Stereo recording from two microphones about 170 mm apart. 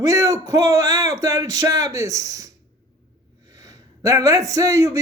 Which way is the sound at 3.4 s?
20° right (ahead or behind).